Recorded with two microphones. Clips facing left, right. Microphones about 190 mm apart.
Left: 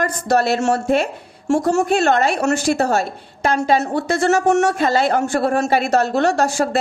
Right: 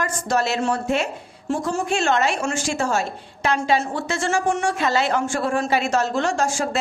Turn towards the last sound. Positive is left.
turn(degrees=65)  # may be behind; listen again after turning